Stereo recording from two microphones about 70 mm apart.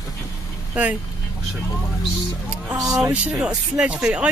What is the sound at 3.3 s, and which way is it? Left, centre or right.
Speech, centre.